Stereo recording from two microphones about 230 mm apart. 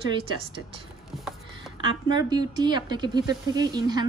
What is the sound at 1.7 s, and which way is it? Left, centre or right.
A woman's voice, centre.